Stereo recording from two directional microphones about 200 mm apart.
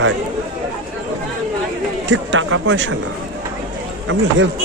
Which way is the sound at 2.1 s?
70° right (ahead or behind).